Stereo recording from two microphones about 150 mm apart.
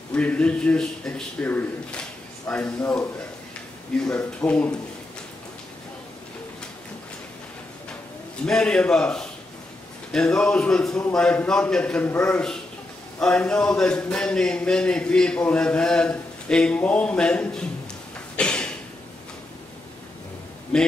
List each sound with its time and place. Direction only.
0.1 s speech: 10° left (ahead or behind)
4.0 s speech: 10° left (ahead or behind)
8.5 s a man's voice: 5° left (ahead or behind)
18.3 s a sound: 5° left (ahead or behind)
20.7 s a man's voice: 5° left (ahead or behind)